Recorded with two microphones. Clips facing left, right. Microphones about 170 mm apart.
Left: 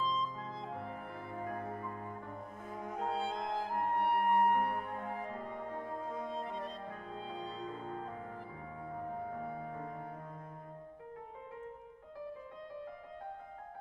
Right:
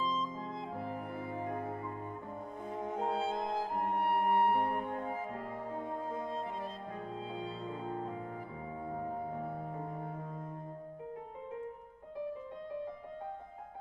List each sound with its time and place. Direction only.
0.0 s clarinet: centre (ahead or behind)
1.3 s music: 25° right (ahead or behind)
3.1 s clarinet: centre (ahead or behind)
4.6 s clarinet: 25° right (ahead or behind)
5.1 s music: 5° right (ahead or behind)
5.7 s music: 25° right (ahead or behind)
6.2 s music: centre (ahead or behind)